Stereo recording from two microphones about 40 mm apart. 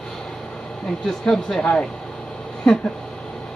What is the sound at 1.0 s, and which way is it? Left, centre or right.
Speech, centre.